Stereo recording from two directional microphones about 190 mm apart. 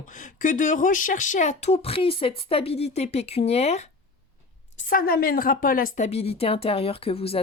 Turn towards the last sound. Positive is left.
turn(degrees=30)  # may be behind; listen again after turning